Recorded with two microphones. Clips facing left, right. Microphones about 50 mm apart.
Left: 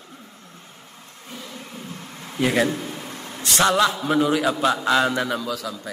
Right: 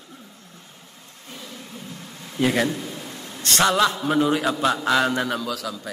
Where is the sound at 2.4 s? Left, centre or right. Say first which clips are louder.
Left 1 dB; centre.